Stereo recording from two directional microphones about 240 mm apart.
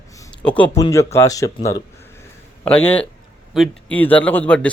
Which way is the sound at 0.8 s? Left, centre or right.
Centre.